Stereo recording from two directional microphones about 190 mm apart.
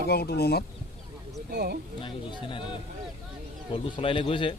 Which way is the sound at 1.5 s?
60° right (ahead or behind).